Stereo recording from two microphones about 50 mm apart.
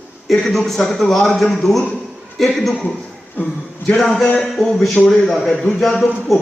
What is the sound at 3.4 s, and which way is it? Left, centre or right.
Speech, left.